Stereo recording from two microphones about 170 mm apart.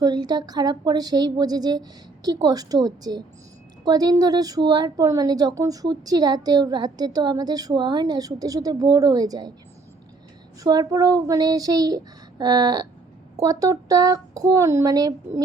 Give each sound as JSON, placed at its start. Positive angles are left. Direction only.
{"t": 0.0, "sound": "speech", "side_deg": -25}
{"t": 10.6, "sound": "speech", "side_deg": -25}